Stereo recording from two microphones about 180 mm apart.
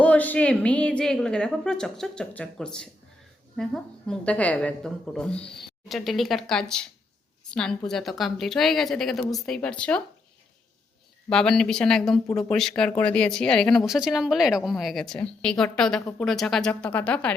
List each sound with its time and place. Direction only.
0.0 s speech: 10° left (ahead or behind)
11.3 s speech: 5° left (ahead or behind)